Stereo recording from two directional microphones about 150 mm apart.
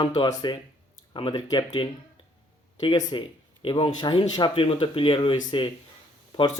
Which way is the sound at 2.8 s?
30° left (ahead or behind).